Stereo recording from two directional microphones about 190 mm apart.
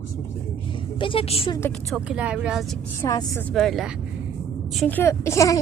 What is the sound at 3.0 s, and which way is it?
Speech, 20° left (ahead or behind).